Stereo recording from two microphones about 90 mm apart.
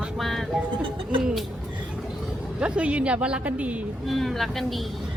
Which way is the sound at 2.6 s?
15° right (ahead or behind).